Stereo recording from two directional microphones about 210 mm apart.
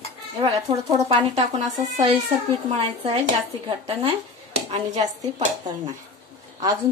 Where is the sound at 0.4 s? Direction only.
25° right (ahead or behind).